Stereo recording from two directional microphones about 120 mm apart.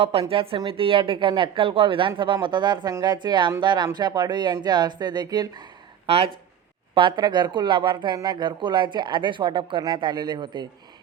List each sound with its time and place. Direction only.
0.0 s speech: 55° right (ahead or behind); by 5.6 s 35° right (ahead or behind)
6.1 s speech: 55° right (ahead or behind)
6.9 s speech: 40° right (ahead or behind)